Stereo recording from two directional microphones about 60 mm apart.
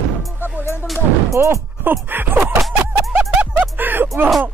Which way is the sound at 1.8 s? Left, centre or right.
Right.